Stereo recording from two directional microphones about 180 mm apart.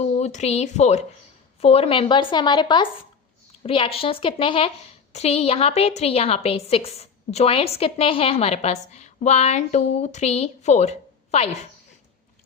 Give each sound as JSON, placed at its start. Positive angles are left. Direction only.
{"t": 0.0, "sound": "a woman's voice", "side_deg": 40}